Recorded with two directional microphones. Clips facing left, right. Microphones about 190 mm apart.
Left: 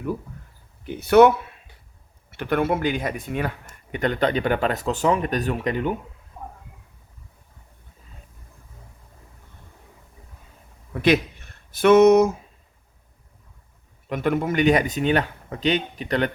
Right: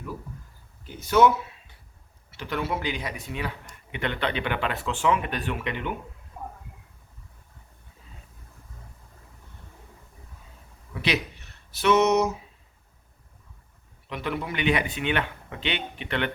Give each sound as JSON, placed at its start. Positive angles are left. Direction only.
{"t": 0.9, "sound": "speech", "side_deg": 65}
{"t": 11.0, "sound": "speech", "side_deg": 50}
{"t": 14.1, "sound": "speech", "side_deg": 45}